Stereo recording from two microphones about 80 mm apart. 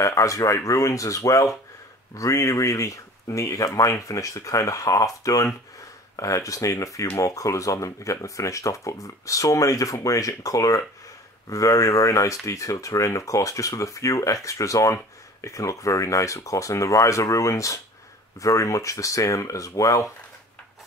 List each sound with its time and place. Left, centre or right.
0.0 s speech: left